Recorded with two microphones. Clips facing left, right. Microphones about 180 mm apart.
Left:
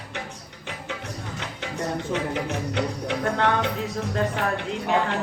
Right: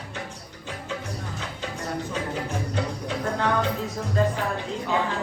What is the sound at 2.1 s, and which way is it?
Music, 70° left (ahead or behind).